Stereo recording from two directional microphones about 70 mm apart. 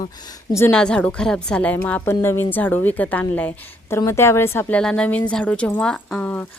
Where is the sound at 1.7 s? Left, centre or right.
Left.